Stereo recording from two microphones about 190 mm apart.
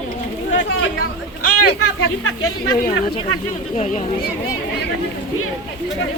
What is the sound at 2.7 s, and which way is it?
Speech, 50° left (ahead or behind).